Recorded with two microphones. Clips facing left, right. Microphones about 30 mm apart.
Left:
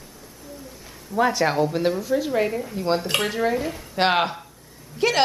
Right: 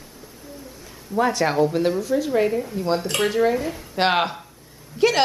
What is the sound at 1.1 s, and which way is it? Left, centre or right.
A woman's voice, centre.